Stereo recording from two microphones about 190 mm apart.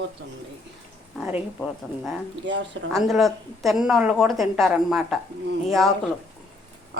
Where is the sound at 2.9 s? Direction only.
Centre (ahead or behind).